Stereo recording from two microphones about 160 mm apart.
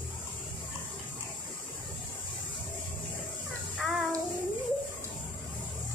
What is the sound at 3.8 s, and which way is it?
Child singing, 5° right (ahead or behind).